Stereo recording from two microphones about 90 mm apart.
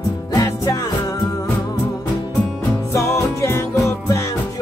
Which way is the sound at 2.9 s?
35° left (ahead or behind).